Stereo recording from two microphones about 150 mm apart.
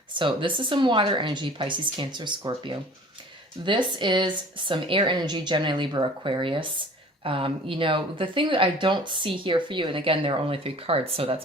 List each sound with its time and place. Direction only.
0.2 s speech: 35° right (ahead or behind)